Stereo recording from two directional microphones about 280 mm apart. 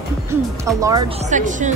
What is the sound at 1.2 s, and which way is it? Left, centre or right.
Speech, right.